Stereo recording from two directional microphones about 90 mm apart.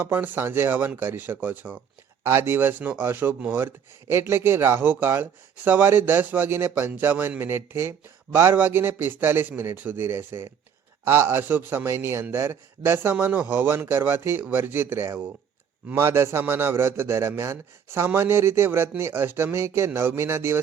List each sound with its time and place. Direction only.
0.0 s speech: 20° right (ahead or behind)